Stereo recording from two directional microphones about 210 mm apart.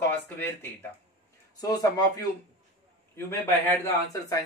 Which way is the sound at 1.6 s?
20° left (ahead or behind).